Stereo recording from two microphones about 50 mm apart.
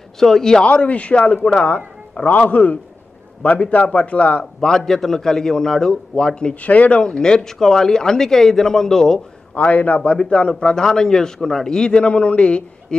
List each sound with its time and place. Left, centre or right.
0.2 s speech: centre
0.7 s speech: left
2.1 s a man's voice: left
4.6 s speech: centre
6.6 s a man's voice: left
7.0 s speech: centre
9.5 s speech: left
10.5 s speech: centre